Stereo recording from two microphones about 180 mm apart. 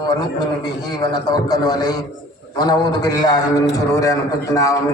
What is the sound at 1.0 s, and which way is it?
A man's voice, 20° left (ahead or behind).